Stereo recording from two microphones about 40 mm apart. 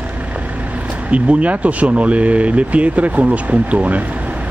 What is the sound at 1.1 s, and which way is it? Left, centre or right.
Speech, right.